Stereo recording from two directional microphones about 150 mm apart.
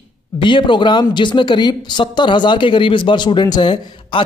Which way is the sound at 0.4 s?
35° left (ahead or behind).